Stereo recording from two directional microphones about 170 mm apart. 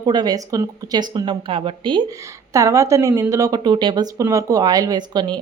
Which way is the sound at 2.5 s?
20° right (ahead or behind).